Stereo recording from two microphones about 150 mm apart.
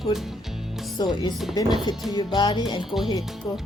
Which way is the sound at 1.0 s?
25° left (ahead or behind).